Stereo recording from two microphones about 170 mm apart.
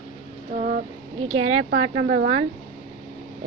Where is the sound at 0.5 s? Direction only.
50° right (ahead or behind).